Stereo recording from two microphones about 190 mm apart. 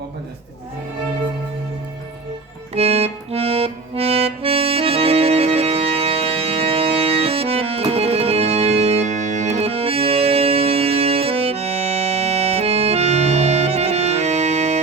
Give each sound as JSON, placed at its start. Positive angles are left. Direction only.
{"t": 2.7, "sound": "accordion", "side_deg": -35}